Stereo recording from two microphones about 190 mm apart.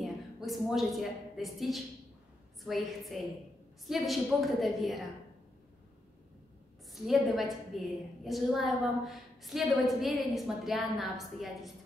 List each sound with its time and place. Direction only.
0.0 s a woman's voice: centre (ahead or behind)
6.9 s a woman's voice: centre (ahead or behind)